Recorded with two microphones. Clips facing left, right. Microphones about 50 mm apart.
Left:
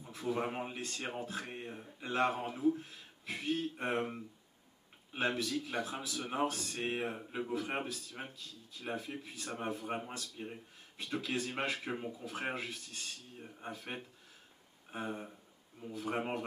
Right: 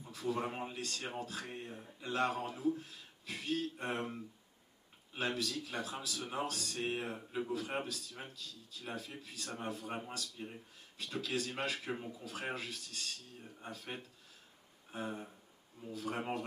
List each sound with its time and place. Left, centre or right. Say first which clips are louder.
0.0 s a man's voice: left 1 dB; left